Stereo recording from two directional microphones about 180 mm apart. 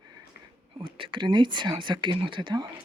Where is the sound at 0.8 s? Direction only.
30° right (ahead or behind).